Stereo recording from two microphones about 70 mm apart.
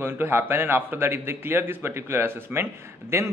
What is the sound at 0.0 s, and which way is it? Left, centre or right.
A man's voice, right.